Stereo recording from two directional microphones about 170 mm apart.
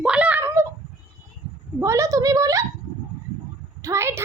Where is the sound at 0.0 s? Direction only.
5° right (ahead or behind).